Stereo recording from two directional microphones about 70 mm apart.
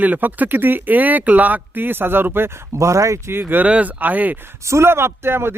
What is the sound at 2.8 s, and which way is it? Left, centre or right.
Speech, right.